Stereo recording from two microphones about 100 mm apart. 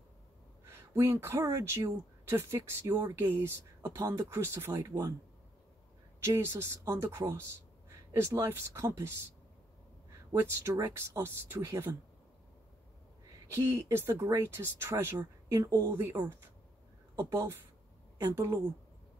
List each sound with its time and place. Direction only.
0.7 s speech: 30° right (ahead or behind)
3.9 s speech: 35° right (ahead or behind)
6.2 s speech: 30° right (ahead or behind)
10.4 s speech: 35° right (ahead or behind)
11.1 s speech: 25° right (ahead or behind)
13.5 s speech: 30° right (ahead or behind)